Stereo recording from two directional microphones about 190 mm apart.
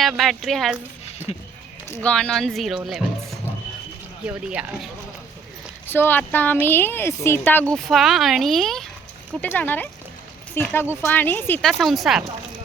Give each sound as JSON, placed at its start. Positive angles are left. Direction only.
{"t": 0.0, "sound": "speech", "side_deg": 0}
{"t": 1.3, "sound": "speech", "side_deg": 30}
{"t": 2.0, "sound": "speech", "side_deg": 5}
{"t": 5.9, "sound": "a woman's voice", "side_deg": 10}